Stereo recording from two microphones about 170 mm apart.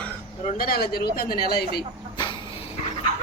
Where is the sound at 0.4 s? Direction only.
55° left (ahead or behind).